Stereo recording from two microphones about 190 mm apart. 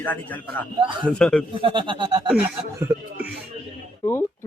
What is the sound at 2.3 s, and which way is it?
Speech, 10° right (ahead or behind).